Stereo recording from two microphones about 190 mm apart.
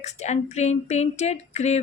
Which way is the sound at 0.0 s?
35° left (ahead or behind).